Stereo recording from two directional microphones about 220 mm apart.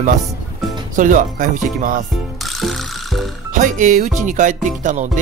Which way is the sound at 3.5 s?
35° right (ahead or behind).